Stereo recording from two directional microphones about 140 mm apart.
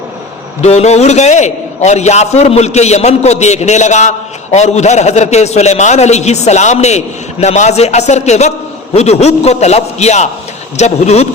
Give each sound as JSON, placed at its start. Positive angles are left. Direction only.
{"t": 0.6, "sound": "a man's voice", "side_deg": 50}